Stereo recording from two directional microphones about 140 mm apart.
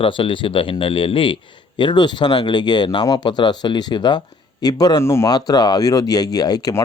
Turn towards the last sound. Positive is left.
turn(degrees=25)  # may be behind; listen again after turning